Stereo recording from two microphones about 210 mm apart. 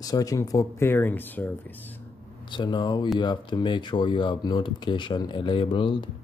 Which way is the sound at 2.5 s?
20° left (ahead or behind).